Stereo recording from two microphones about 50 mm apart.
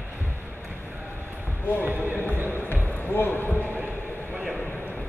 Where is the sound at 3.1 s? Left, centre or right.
Left.